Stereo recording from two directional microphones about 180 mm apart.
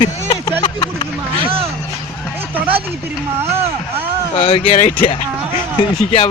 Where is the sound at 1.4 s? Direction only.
30° right (ahead or behind).